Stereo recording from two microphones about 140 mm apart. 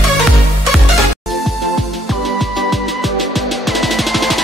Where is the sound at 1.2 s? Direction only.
Centre (ahead or behind).